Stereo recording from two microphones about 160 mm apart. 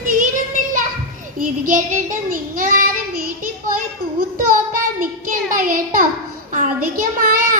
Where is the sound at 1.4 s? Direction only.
55° right (ahead or behind).